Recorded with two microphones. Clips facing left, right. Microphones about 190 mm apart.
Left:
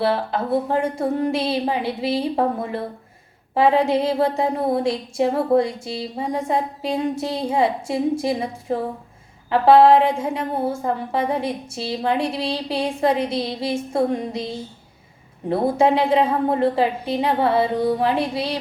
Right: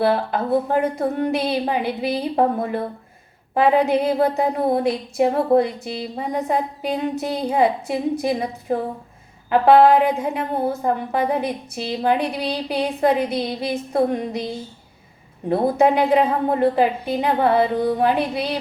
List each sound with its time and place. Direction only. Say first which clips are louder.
0.0 s a woman's voice: right 2 dB; 25° left (ahead or behind)
3.5 s a woman's voice: even; 25° left (ahead or behind)
9.5 s a woman's voice: even; 30° left (ahead or behind)
15.4 s a woman's voice: right 1 dB; 25° left (ahead or behind)